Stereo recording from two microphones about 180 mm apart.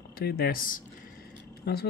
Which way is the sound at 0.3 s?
55° left (ahead or behind).